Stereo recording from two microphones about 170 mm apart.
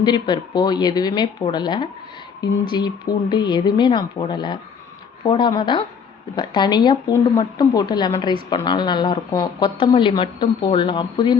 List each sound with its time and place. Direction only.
0.0 s a woman's voice: 25° left (ahead or behind)